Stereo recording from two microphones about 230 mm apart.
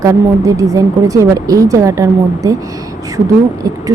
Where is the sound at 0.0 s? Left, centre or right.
Centre.